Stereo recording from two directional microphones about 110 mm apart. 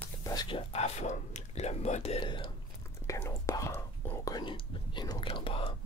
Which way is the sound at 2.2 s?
50° left (ahead or behind).